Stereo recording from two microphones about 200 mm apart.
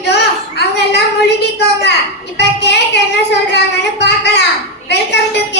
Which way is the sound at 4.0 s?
55° left (ahead or behind).